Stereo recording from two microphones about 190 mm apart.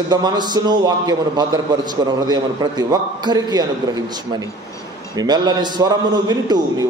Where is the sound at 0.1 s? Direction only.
20° right (ahead or behind).